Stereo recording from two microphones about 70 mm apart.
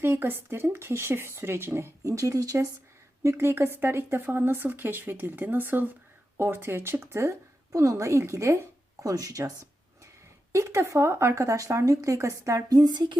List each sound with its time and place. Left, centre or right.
0.0 s speech: right
3.2 s a woman's voice: right
10.5 s speech: right